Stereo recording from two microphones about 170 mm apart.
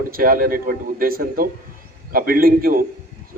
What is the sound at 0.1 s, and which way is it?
A man's voice, 55° right (ahead or behind).